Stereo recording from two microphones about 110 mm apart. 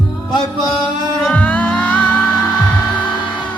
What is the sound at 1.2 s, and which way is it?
Music, 15° left (ahead or behind).